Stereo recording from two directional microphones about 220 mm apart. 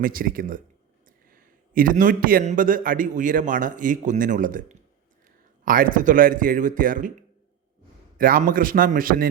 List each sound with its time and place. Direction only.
0.0 s a man's voice: 40° right (ahead or behind)